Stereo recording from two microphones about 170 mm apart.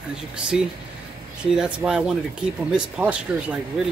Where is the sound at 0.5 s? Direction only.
5° right (ahead or behind).